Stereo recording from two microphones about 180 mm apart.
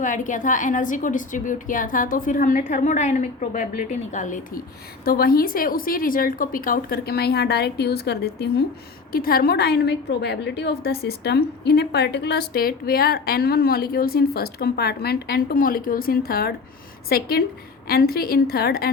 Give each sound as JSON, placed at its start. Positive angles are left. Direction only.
{"t": 0.0, "sound": "a woman's voice", "side_deg": 45}
{"t": 5.0, "sound": "a woman's voice", "side_deg": 55}